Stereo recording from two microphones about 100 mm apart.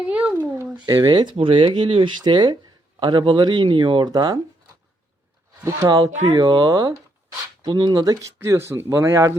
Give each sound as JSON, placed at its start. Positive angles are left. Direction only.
{"t": 0.0, "sound": "a child's voice", "side_deg": -15}
{"t": 0.9, "sound": "speech", "side_deg": -40}
{"t": 1.4, "sound": "speech", "side_deg": -60}
{"t": 2.3, "sound": "speech", "side_deg": -45}
{"t": 5.9, "sound": "speech", "side_deg": -45}
{"t": 8.4, "sound": "speech", "side_deg": -25}